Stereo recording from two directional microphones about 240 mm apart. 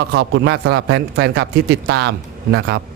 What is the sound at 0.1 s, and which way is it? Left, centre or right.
A man's voice, right.